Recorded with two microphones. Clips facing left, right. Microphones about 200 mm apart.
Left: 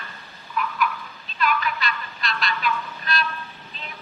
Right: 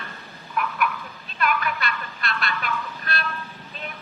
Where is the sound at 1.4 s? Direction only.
55° right (ahead or behind).